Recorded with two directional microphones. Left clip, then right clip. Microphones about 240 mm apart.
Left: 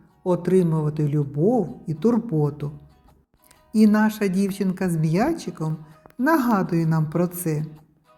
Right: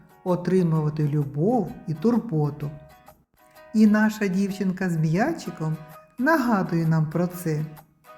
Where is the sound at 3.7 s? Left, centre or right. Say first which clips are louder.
Left 1 dB; centre.